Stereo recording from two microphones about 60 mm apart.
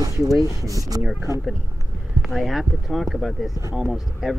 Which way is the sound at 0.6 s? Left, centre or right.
Right.